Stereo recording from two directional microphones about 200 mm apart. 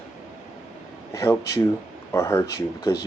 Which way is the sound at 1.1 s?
15° left (ahead or behind).